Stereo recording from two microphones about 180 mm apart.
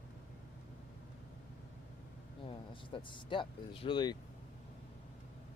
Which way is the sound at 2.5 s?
25° left (ahead or behind).